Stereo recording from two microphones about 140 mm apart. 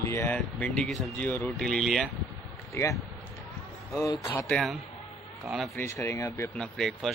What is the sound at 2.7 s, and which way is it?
Speech, 20° left (ahead or behind).